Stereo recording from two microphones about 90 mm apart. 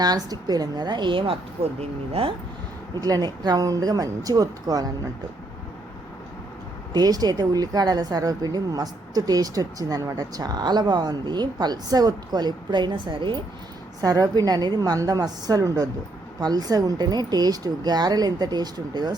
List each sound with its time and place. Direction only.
0.0 s a woman's voice: 45° right (ahead or behind); by 1.4 s 70° right (ahead or behind)
3.0 s a woman's voice: 45° right (ahead or behind)
6.9 s a woman's voice: 45° right (ahead or behind); by 13.4 s 65° right (ahead or behind)
14.0 s a woman's voice: 45° right (ahead or behind)